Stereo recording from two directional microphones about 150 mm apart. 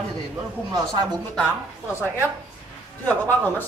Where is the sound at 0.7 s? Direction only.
25° right (ahead or behind).